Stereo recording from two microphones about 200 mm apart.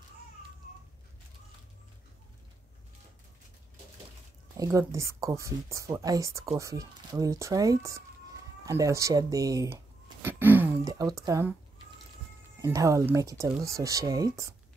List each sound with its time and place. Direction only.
4.6 s speech: 15° right (ahead or behind)
12.6 s speech: 15° right (ahead or behind)